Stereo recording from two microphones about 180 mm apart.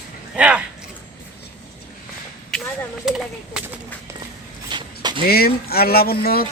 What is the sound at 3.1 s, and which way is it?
Speech, 5° right (ahead or behind).